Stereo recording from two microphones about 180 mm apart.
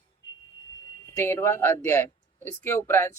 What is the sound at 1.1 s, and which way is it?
Speech, 15° left (ahead or behind).